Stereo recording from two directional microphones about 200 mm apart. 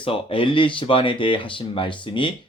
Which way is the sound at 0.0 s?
25° left (ahead or behind).